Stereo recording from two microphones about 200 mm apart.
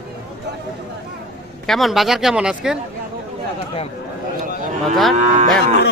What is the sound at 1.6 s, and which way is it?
Speech, centre (ahead or behind).